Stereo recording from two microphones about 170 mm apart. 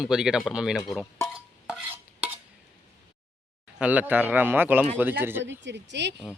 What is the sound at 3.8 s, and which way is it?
Speech, 10° right (ahead or behind).